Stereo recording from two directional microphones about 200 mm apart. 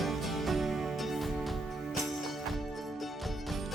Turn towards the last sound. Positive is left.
turn(degrees=0)  # may be behind; listen again after turning